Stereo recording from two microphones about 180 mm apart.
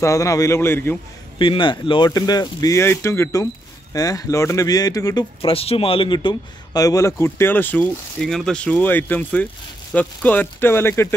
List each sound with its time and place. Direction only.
0.0 s speech: 20° left (ahead or behind)
1.4 s speech: 30° left (ahead or behind); by 11.1 s 10° left (ahead or behind)